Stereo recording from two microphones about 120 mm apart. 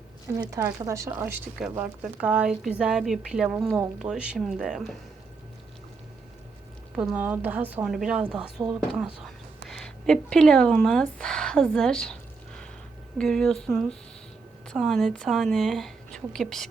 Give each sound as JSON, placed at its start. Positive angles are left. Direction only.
{"t": 0.5, "sound": "a woman's voice", "side_deg": -25}
{"t": 1.8, "sound": "speech", "side_deg": -10}
{"t": 6.9, "sound": "speech", "side_deg": -10}
{"t": 7.9, "sound": "speech", "side_deg": -5}
{"t": 8.6, "sound": "speech", "side_deg": -35}
{"t": 9.6, "sound": "speech", "side_deg": 5}
{"t": 13.1, "sound": "speech", "side_deg": 5}